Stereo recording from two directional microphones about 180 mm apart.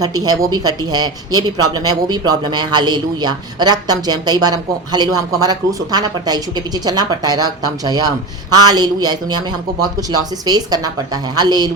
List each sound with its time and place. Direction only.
0.0 s speech: 20° right (ahead or behind)